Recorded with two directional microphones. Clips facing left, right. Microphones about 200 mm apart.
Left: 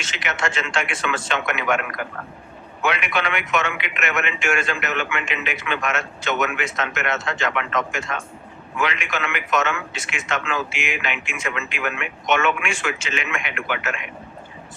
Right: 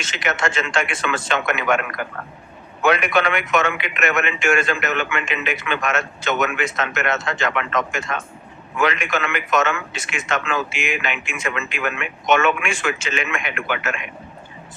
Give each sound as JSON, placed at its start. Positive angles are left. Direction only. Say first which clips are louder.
{"t": 0.0, "sound": "a man's voice", "louder": "right 3 dB", "side_deg": -45}
{"t": 2.8, "sound": "a man's voice", "louder": "right 5 dB", "side_deg": -45}